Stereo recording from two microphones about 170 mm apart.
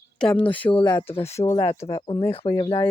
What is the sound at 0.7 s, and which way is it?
Speech, 25° left (ahead or behind).